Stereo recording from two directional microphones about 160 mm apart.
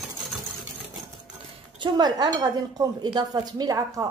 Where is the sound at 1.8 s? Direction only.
25° right (ahead or behind).